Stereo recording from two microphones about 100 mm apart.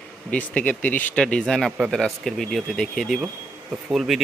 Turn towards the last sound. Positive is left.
turn(degrees=0)  # may be behind; listen again after turning